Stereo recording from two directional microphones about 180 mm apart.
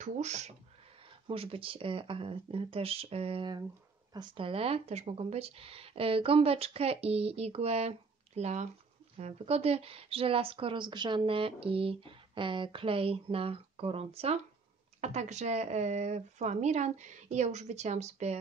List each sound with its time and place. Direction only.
0.0 s speech: 40° right (ahead or behind)